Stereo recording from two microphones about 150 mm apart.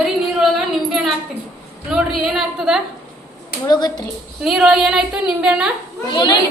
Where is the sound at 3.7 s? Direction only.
25° left (ahead or behind).